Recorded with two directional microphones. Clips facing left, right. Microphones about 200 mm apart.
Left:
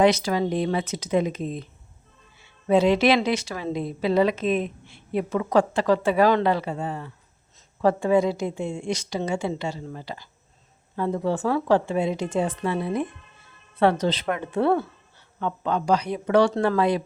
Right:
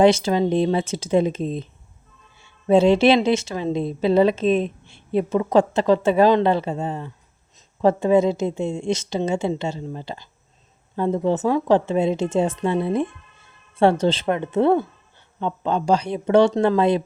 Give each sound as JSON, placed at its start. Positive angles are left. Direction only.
{"t": 0.0, "sound": "a woman's voice", "side_deg": -25}
{"t": 2.6, "sound": "a woman's voice", "side_deg": -25}